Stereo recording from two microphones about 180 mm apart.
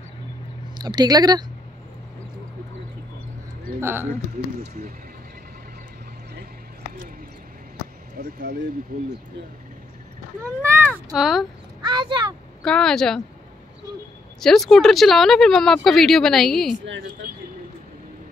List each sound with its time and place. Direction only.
0.7 s speech: 25° right (ahead or behind)
3.8 s speech: 10° right (ahead or behind)
8.2 s speech: 50° right (ahead or behind)
11.1 s speech: centre (ahead or behind)
11.8 s speech: 25° right (ahead or behind)
12.6 s speech: 5° left (ahead or behind)
14.4 s speech: centre (ahead or behind)
17.2 s speech: 55° right (ahead or behind)